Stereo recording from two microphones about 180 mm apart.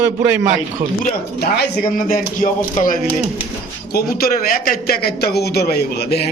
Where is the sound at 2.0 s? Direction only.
50° left (ahead or behind).